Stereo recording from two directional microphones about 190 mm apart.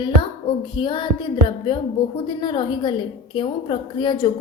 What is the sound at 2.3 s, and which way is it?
A woman's voice, 25° left (ahead or behind).